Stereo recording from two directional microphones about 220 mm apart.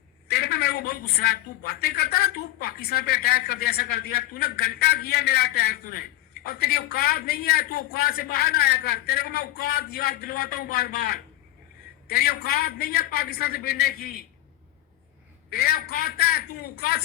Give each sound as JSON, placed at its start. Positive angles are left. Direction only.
{"t": 0.3, "sound": "a woman's voice", "side_deg": 45}
{"t": 15.4, "sound": "a woman's voice", "side_deg": 40}